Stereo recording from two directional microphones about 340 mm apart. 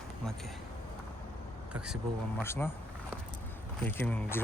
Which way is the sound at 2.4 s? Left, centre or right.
Centre.